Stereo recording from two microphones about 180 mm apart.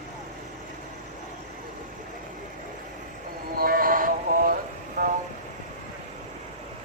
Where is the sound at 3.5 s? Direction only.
55° right (ahead or behind).